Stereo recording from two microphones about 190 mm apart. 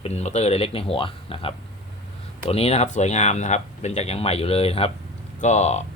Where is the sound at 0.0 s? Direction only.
35° left (ahead or behind).